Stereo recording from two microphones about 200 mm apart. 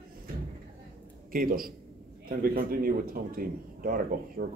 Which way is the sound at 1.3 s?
45° right (ahead or behind).